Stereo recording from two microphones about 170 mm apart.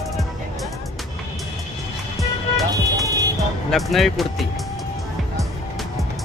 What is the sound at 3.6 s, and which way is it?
Speech, centre (ahead or behind).